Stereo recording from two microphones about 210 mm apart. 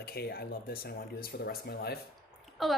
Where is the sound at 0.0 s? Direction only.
50° left (ahead or behind).